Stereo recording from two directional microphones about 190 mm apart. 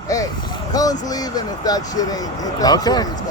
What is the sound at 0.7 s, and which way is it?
Speech, 20° left (ahead or behind).